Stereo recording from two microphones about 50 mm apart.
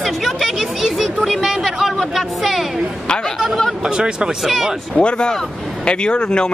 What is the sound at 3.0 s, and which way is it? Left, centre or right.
Speech, centre.